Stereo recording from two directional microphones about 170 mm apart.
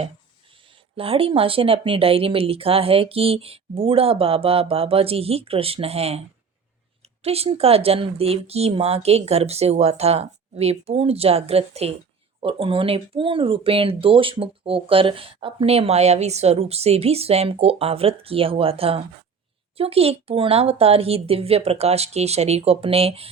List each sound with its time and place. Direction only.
0.9 s speech: 35° right (ahead or behind)